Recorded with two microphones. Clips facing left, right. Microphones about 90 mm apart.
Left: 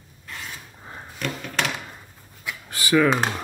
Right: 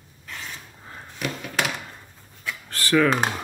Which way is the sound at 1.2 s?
5° right (ahead or behind).